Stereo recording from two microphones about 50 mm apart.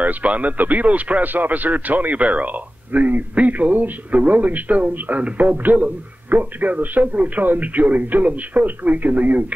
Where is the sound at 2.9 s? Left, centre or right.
Right.